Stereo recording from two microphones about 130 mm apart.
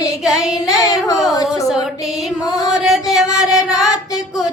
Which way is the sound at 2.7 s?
5° right (ahead or behind).